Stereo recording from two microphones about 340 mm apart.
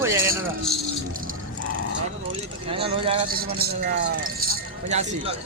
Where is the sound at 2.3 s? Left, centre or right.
Centre.